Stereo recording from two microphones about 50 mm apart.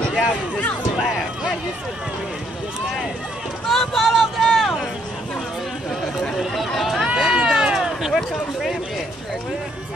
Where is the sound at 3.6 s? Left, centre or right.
Centre.